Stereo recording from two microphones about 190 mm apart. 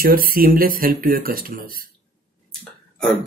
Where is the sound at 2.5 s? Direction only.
5° left (ahead or behind).